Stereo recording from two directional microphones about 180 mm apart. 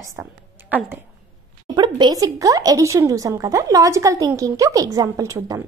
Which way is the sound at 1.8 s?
25° right (ahead or behind).